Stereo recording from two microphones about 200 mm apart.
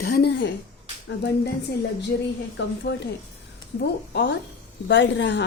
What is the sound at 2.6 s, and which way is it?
Speech, 60° left (ahead or behind).